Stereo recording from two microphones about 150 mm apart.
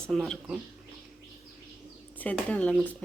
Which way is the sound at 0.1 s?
Centre (ahead or behind).